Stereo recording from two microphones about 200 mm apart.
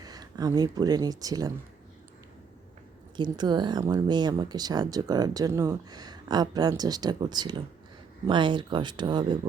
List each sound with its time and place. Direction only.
0.0 s speech: 20° right (ahead or behind)
3.2 s speech: 20° right (ahead or behind)